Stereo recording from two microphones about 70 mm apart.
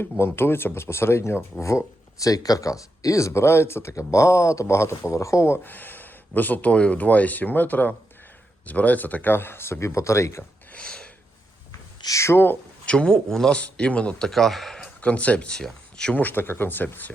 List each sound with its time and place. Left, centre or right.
0.0 s speech: left
1.6 s speech: left
3.9 s speech: left
5.6 s speech: left
10.7 s a sound: centre
12.0 s speech: left
12.8 s a man's voice: centre
13.6 s a man's voice: centre
15.0 s a man's voice: centre
16.1 s speech: left